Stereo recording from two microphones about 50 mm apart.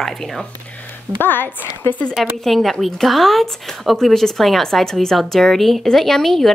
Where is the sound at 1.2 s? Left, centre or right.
Left.